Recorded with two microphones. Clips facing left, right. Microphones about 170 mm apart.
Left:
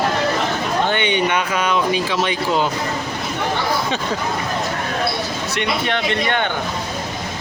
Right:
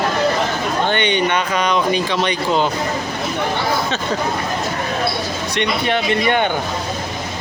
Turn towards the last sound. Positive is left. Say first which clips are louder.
# right 3 dB
turn(degrees=-15)  # may be behind; listen again after turning